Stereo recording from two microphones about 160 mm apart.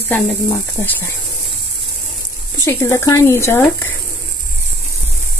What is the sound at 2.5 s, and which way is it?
Speech, 15° left (ahead or behind).